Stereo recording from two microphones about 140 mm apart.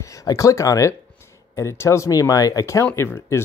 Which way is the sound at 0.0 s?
25° left (ahead or behind).